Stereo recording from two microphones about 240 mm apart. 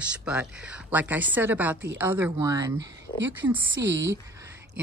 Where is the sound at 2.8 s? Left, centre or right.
Right.